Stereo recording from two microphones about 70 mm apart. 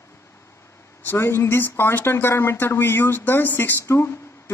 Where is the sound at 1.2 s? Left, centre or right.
Left.